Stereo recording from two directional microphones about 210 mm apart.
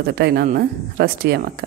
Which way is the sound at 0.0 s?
50° right (ahead or behind).